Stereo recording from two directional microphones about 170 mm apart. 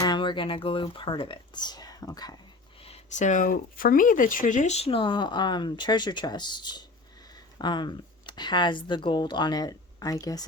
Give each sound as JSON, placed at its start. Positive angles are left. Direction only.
{"t": 0.0, "sound": "speech", "side_deg": 25}
{"t": 2.8, "sound": "speech", "side_deg": 40}